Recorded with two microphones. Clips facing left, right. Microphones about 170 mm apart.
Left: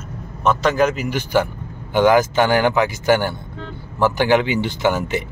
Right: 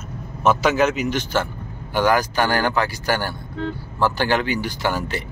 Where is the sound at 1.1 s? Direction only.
10° left (ahead or behind).